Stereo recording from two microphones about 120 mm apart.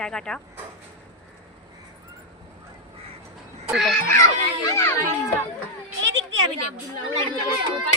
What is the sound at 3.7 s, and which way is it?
Speech, 5° right (ahead or behind).